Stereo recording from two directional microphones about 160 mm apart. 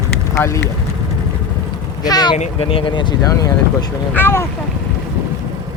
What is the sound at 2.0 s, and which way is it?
Speech, 25° left (ahead or behind).